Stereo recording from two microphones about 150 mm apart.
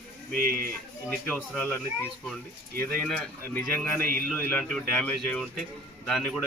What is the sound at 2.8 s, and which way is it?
A man's voice, 5° left (ahead or behind).